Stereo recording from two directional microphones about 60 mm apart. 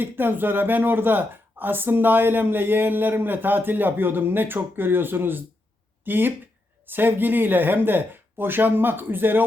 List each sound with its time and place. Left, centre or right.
0.0 s speech: right